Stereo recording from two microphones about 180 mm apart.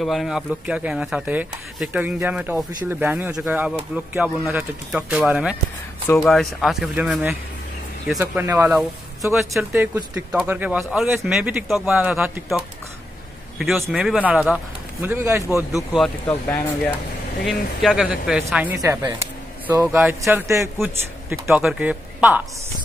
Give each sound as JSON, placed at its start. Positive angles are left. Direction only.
{"t": 0.0, "sound": "speech", "side_deg": 0}
{"t": 16.3, "sound": "speech", "side_deg": 10}
{"t": 17.5, "sound": "speech", "side_deg": 0}
{"t": 18.8, "sound": "speech", "side_deg": -20}
{"t": 21.5, "sound": "speech", "side_deg": -5}